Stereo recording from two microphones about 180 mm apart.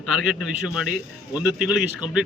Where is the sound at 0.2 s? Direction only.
Centre (ahead or behind).